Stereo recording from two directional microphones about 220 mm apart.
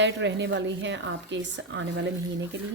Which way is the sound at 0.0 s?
55° right (ahead or behind).